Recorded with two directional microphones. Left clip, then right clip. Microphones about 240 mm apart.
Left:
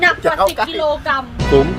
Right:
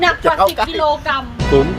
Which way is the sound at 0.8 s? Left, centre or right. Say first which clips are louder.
Right 1 dB; centre.